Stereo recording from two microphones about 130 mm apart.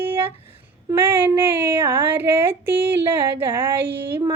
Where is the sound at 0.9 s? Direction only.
15° right (ahead or behind).